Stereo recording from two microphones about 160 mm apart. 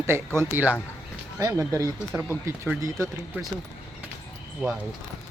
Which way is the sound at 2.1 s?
5° right (ahead or behind).